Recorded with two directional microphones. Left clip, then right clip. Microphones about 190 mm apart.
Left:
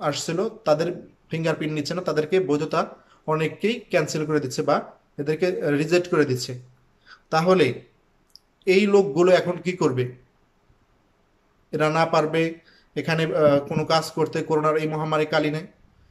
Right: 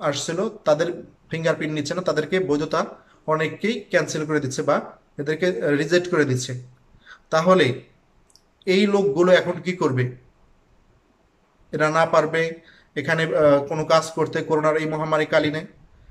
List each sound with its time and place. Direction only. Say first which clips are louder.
0.0 s a man's voice: right 1 dB; 5° left (ahead or behind)
11.7 s a man's voice: right 2 dB; 5° left (ahead or behind)